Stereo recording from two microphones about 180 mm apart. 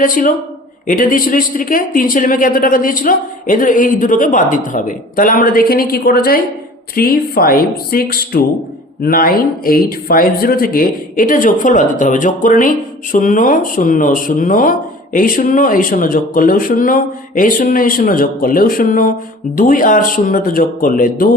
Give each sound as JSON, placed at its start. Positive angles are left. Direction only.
{"t": 0.0, "sound": "speech", "side_deg": 50}